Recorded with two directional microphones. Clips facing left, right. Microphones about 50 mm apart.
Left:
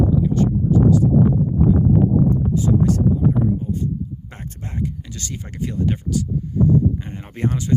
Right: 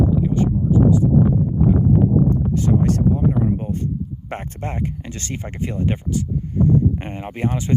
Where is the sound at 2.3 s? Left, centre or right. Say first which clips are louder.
Even; right.